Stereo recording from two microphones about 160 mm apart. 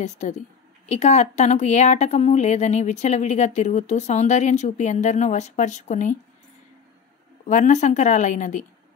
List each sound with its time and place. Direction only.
0.0 s a woman's voice: 45° left (ahead or behind)
7.4 s a woman's voice: 50° left (ahead or behind)